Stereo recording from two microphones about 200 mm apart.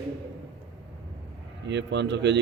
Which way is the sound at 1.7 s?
60° right (ahead or behind).